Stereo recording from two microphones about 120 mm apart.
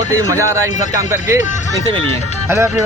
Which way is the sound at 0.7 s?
90° left.